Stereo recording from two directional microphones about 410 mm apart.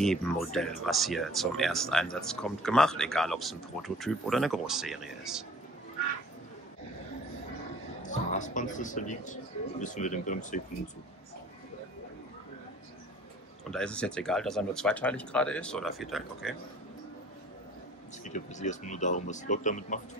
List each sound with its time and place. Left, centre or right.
0.0 s speech: centre
8.0 s speech: centre
13.7 s speech: centre
18.2 s speech: centre